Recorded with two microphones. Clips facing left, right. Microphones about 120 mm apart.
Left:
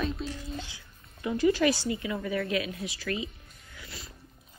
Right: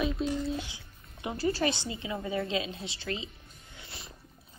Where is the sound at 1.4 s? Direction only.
35° right (ahead or behind).